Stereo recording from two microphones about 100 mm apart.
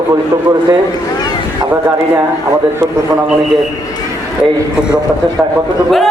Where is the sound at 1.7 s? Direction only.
25° right (ahead or behind).